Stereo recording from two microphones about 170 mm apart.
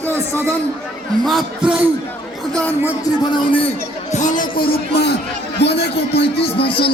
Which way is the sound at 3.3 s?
30° left (ahead or behind).